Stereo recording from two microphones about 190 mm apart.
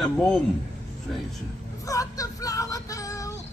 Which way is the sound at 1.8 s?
15° left (ahead or behind).